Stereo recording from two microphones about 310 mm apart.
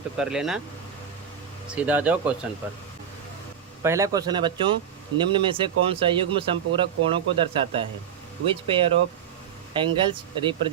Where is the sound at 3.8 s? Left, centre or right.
Centre.